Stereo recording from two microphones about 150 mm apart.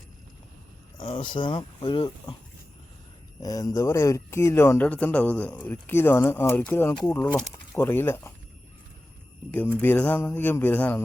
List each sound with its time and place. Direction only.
1.0 s speech: 30° left (ahead or behind)
3.4 s speech: 25° left (ahead or behind)
9.5 s speech: 10° left (ahead or behind)